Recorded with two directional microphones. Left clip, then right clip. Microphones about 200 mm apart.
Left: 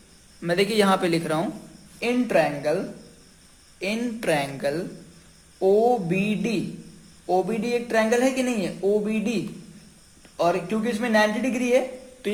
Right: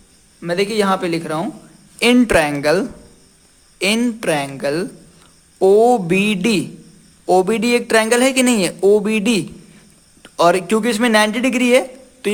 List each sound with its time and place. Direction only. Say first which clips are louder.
0.4 s speech: right 4 dB; 15° right (ahead or behind)
2.0 s speech: right 8 dB; 40° right (ahead or behind)
3.8 s speech: right 10 dB; 35° right (ahead or behind)
5.5 s speech: right 8 dB; 40° right (ahead or behind)